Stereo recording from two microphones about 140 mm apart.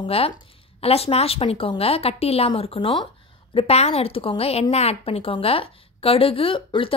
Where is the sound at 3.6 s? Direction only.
45° left (ahead or behind).